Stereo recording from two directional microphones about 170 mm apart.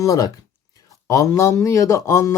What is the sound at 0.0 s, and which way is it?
Speech, 20° left (ahead or behind).